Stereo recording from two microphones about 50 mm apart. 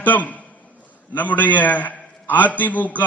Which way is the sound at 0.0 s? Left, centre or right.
Left.